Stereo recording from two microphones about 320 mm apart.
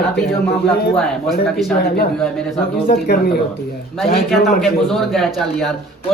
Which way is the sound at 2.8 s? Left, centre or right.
Left.